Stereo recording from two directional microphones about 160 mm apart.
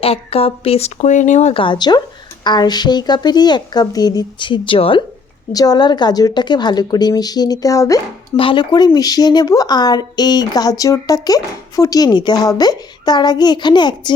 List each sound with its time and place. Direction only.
0.0 s speech: 40° left (ahead or behind)
1.6 s speech: 30° left (ahead or behind)